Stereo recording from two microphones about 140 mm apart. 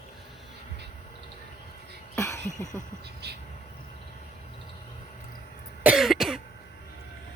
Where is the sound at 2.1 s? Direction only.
20° left (ahead or behind).